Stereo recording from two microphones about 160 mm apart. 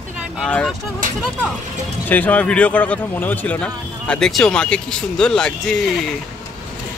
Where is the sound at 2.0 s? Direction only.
10° left (ahead or behind).